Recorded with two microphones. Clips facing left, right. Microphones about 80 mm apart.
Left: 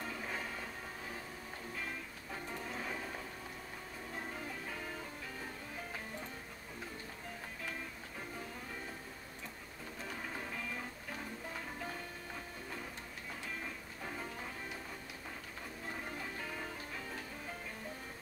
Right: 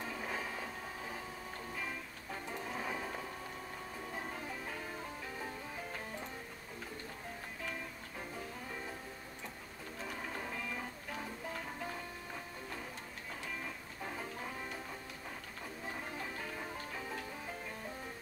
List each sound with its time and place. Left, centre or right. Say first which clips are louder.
0.0 s music: right 1 dB; centre
2.7 s music: right 3 dB; centre
10.0 s music: right 2 dB; centre